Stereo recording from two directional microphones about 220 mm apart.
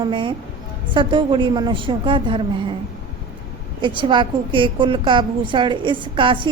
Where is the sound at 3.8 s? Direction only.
20° right (ahead or behind).